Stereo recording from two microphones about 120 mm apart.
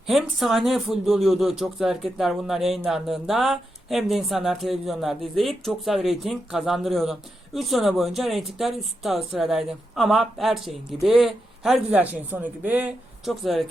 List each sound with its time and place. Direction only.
0.1 s speech: centre (ahead or behind)
13.2 s speech: centre (ahead or behind)